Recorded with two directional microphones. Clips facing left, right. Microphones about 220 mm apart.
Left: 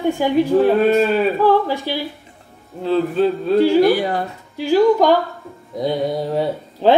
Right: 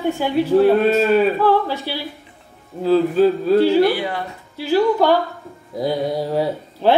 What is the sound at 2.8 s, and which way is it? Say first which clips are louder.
Speech: right 2 dB; centre (ahead or behind).